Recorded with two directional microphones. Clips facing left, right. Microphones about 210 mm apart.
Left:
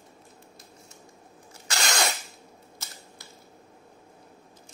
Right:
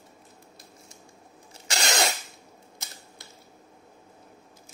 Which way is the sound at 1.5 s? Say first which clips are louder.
Right 2 dB; 25° right (ahead or behind).